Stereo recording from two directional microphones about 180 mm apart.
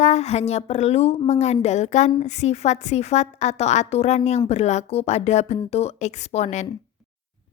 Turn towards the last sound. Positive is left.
turn(degrees=40)  # may be behind; listen again after turning